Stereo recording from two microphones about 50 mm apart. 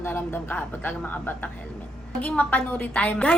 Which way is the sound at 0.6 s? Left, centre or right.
Left.